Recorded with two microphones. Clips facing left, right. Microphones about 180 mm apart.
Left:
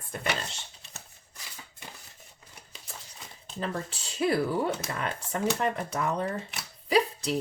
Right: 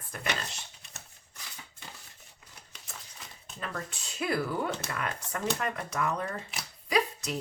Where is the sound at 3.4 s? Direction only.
30° left (ahead or behind).